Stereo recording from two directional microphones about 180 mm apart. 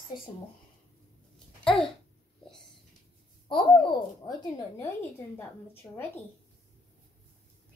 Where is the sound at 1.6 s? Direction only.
5° left (ahead or behind).